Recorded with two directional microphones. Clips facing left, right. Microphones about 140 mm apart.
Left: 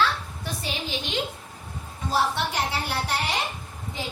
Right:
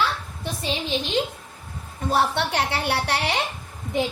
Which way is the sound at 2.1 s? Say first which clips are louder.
Right 3 dB; 65° right (ahead or behind).